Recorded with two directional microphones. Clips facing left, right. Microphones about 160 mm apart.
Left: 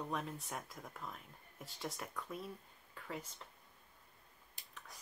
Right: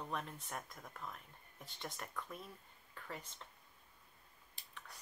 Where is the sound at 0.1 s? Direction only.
Centre (ahead or behind).